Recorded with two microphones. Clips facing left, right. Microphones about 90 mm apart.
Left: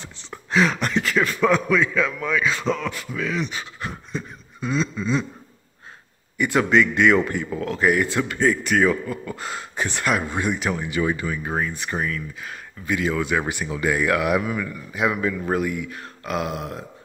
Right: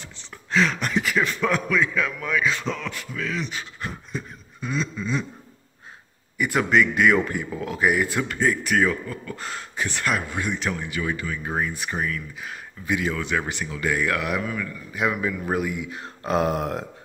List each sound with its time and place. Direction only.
0.5 s a sound: 10° left (ahead or behind)
0.9 s speech: 10° right (ahead or behind)
1.3 s a man's voice: centre (ahead or behind)
4.1 s a sound: centre (ahead or behind)
6.3 s a man's voice: 5° right (ahead or behind); by 11.3 s 25° left (ahead or behind)
11.4 s a man's voice: centre (ahead or behind)
13.1 s speech: 10° left (ahead or behind)
15.0 s a man's voice: centre (ahead or behind)
15.7 s speech: 15° right (ahead or behind)
16.3 s a sound: 35° right (ahead or behind)